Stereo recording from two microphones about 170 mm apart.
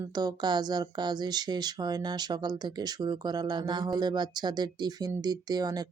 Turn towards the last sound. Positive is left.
turn(degrees=-25)  # may be behind; listen again after turning